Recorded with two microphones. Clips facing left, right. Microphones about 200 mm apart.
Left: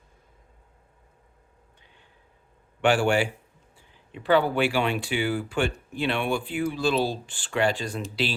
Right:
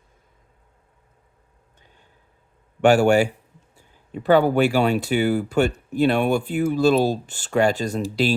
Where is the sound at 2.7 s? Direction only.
45° right (ahead or behind).